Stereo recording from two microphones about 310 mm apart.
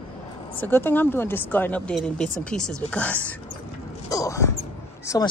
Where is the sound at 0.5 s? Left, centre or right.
Centre.